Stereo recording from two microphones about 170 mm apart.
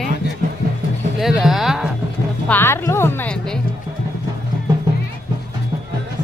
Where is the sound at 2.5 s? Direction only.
15° left (ahead or behind).